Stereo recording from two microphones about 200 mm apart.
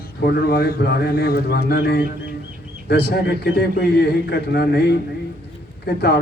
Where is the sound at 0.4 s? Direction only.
50° left (ahead or behind).